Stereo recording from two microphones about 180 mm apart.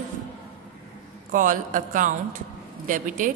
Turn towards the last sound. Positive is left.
turn(degrees=-45)  # may be behind; listen again after turning